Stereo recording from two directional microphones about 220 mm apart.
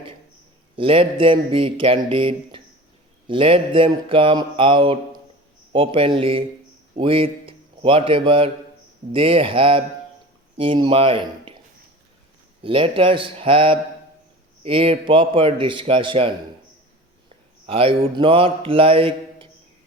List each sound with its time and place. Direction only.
0.8 s a man's voice: 25° right (ahead or behind)
12.6 s a man's voice: 25° right (ahead or behind)
17.7 s a man's voice: 25° right (ahead or behind)